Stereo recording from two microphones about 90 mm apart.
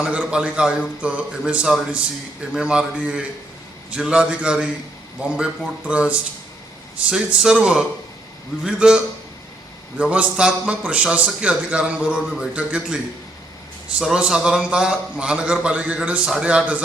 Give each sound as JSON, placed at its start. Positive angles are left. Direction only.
{"t": 0.0, "sound": "a man's voice", "side_deg": -10}
{"t": 14.2, "sound": "a man's voice", "side_deg": -5}